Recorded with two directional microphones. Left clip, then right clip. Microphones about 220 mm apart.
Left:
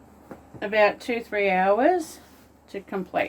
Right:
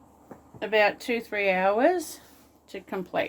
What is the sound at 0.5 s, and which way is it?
Speech, 50° right (ahead or behind).